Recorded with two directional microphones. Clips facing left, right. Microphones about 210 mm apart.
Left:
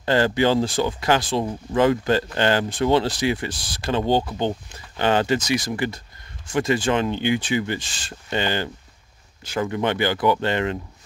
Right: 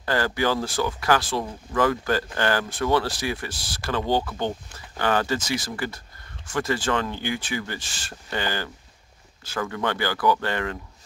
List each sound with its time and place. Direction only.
0.0 s speech: 20° left (ahead or behind)